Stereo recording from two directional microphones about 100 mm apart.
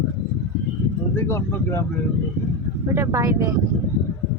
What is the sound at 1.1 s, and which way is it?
Speech, 25° left (ahead or behind).